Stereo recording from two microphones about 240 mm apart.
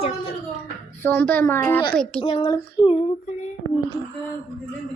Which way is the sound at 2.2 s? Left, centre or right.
Left.